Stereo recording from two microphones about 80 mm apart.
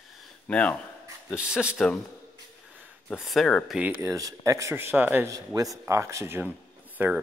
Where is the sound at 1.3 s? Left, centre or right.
Centre.